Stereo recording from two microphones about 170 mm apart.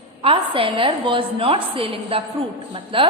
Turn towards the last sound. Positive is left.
turn(degrees=-30)  # may be behind; listen again after turning